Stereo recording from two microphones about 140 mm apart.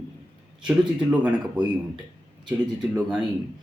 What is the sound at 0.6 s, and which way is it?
Speech, 10° right (ahead or behind).